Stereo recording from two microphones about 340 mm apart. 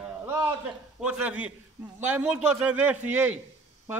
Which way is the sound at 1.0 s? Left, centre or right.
Centre.